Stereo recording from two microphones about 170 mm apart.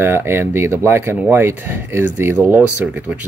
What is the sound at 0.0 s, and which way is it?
Speech, 15° right (ahead or behind).